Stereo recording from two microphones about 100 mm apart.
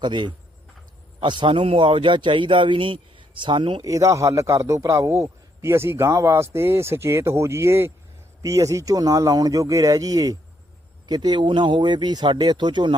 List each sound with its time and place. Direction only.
0.0 s a man's voice: 50° right (ahead or behind)
3.8 s a man's voice: 35° right (ahead or behind); by 13.0 s 50° right (ahead or behind)